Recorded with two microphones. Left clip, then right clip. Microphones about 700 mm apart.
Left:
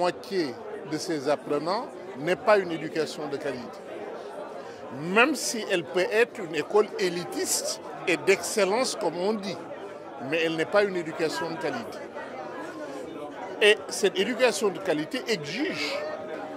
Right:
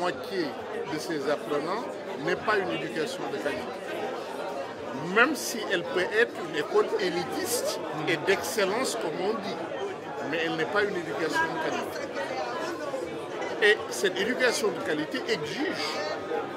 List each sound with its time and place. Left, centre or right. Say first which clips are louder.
0.0 s speech: left 2 dB; left
5.1 s speech: left 1 dB; left
10.3 s speech: left 4 dB; left
13.6 s speech: left 2 dB; left